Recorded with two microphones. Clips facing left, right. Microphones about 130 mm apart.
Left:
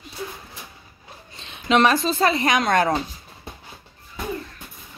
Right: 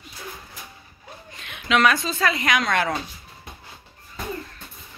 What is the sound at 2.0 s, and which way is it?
Speech, 30° left (ahead or behind).